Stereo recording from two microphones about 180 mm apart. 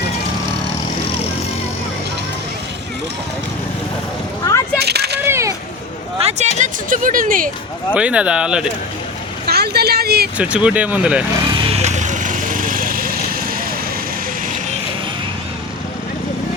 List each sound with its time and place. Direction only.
4.8 s a sound: 65° right (ahead or behind)
5.2 s single-lens reflex camera: 15° right (ahead or behind)
6.1 s a sound: 35° right (ahead or behind)
6.6 s speech: 45° right (ahead or behind)
7.9 s speech: 5° right (ahead or behind)
9.5 s speech: 60° right (ahead or behind)
10.3 s speech: 5° right (ahead or behind)
11.7 s vehicle: 40° right (ahead or behind); by 13.6 s 55° right (ahead or behind)